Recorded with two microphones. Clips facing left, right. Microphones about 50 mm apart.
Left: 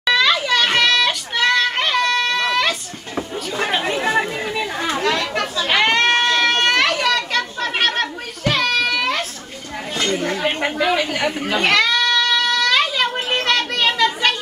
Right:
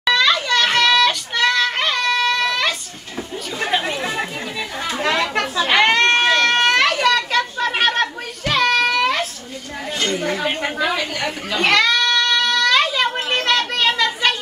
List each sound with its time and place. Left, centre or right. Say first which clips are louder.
0.0 s child singing: even; centre
3.7 s chatter: right 1 dB; centre
4.2 s chatter: left 4 dB; centre
5.0 s chatter: right 3 dB; centre
5.7 s children playing: right 1 dB; centre
10.1 s speech: even; centre
10.9 s a sound: left 3 dB; centre